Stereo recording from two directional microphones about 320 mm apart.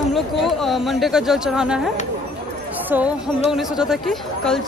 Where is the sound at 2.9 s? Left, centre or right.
Centre.